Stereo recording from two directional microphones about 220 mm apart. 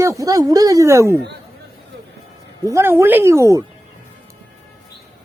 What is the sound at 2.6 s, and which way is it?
Speech, 10° right (ahead or behind).